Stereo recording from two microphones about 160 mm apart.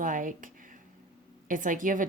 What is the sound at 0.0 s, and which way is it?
Speech, 55° right (ahead or behind).